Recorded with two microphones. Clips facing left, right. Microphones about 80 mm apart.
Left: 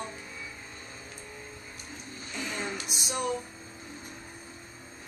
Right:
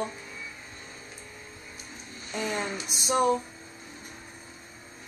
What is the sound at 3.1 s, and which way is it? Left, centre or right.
Speech, right.